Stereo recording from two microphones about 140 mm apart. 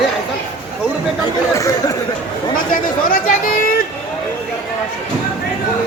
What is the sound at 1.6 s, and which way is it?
Chatter, 25° left (ahead or behind).